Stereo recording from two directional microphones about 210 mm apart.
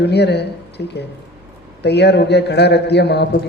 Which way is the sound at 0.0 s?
55° left (ahead or behind).